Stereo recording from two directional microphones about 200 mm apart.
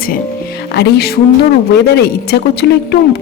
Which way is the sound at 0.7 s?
55° left (ahead or behind).